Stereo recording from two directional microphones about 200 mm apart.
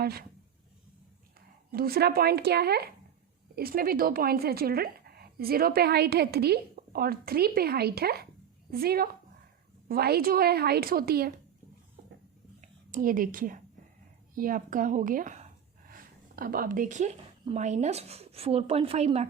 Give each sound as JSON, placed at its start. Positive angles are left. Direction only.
{"t": 0.0, "sound": "speech", "side_deg": -50}
{"t": 1.7, "sound": "speech", "side_deg": -50}
{"t": 12.6, "sound": "a woman's voice", "side_deg": -40}